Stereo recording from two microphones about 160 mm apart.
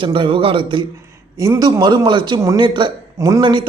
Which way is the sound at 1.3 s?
20° right (ahead or behind).